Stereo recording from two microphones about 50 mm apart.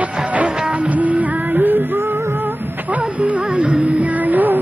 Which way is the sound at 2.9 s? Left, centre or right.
Right.